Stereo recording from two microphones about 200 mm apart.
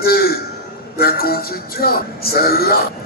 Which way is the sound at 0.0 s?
50° left (ahead or behind).